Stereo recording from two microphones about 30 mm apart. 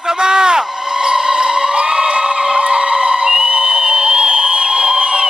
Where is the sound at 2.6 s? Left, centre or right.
Right.